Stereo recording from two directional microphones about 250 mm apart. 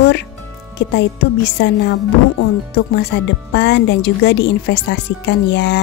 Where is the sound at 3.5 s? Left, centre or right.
Left.